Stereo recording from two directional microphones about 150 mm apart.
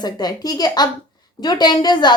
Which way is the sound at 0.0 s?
25° left (ahead or behind).